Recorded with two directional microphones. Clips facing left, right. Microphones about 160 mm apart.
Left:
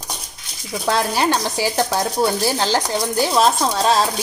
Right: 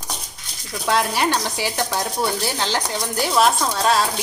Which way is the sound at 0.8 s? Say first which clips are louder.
Left 1 dB; 35° left (ahead or behind).